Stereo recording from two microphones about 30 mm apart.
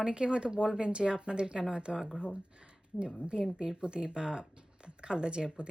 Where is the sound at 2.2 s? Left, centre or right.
Right.